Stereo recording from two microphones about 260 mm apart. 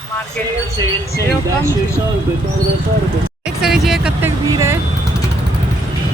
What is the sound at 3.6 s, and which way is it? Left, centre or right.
Speech, centre.